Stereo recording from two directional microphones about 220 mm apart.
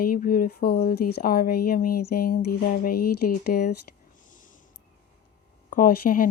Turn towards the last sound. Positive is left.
turn(degrees=40)  # may be behind; listen again after turning